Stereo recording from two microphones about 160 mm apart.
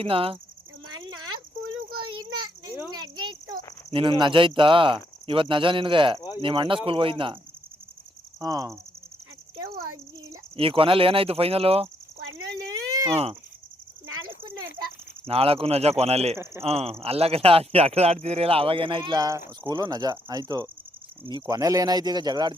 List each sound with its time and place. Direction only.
0.0 s speech: 35° right (ahead or behind)
0.9 s cricket: 25° right (ahead or behind)
2.0 s a sound: 30° right (ahead or behind)
2.9 s cricket: 25° right (ahead or behind)
3.9 s speech: 30° right (ahead or behind)
8.4 s speech: 20° right (ahead or behind)
10.6 s speech: 35° right (ahead or behind)
12.9 s insect: 25° right (ahead or behind)
14.3 s a sound: 25° right (ahead or behind)
15.3 s speech: 35° right (ahead or behind)